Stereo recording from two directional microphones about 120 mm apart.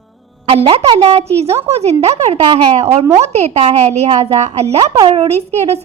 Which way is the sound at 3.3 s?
60° right (ahead or behind).